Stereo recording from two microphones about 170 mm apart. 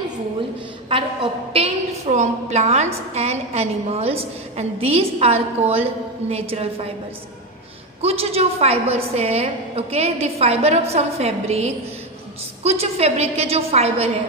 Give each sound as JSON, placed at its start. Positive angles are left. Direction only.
{"t": 0.8, "sound": "a woman's voice", "side_deg": -35}
{"t": 8.0, "sound": "a woman's voice", "side_deg": -35}